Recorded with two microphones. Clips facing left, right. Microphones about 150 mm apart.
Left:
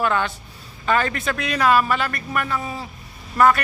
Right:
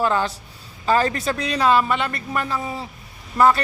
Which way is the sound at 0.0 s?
30° right (ahead or behind).